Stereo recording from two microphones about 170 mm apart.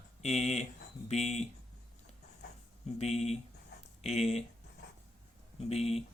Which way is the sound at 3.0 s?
40° left (ahead or behind).